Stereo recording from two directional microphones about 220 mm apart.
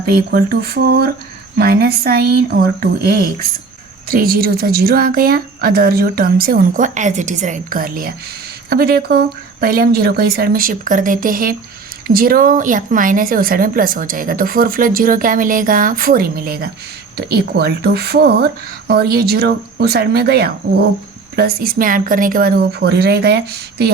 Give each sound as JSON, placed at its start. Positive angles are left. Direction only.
{"t": 0.0, "sound": "a woman's voice", "side_deg": -45}